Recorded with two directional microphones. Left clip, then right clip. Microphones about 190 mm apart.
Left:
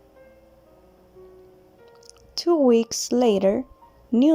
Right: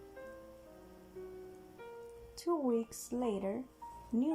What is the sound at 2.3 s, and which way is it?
A woman's voice, 50° left (ahead or behind).